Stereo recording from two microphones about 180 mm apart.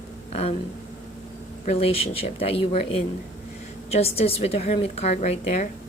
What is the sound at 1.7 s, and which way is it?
A woman's voice, 35° left (ahead or behind).